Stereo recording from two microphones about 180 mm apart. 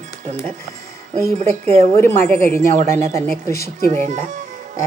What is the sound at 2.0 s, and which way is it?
A woman's voice, 15° left (ahead or behind).